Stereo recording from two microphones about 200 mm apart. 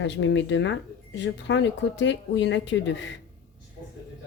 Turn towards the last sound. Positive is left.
turn(degrees=65)  # may be behind; listen again after turning